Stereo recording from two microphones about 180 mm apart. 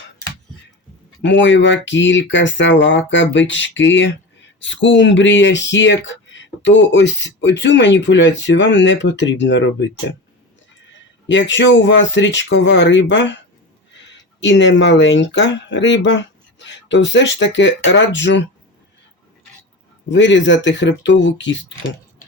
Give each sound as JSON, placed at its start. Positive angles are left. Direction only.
{"t": 1.2, "sound": "speech", "side_deg": 85}
{"t": 11.3, "sound": "speech", "side_deg": 80}
{"t": 14.4, "sound": "speech", "side_deg": 85}
{"t": 20.1, "sound": "speech", "side_deg": 85}